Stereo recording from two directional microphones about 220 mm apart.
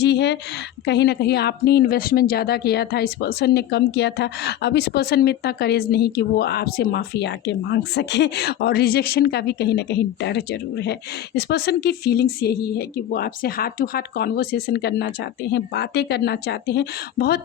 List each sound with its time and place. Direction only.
0.0 s a woman's voice: 50° left (ahead or behind)